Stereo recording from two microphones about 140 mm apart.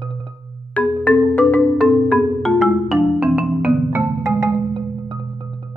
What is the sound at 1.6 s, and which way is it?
Music, centre (ahead or behind).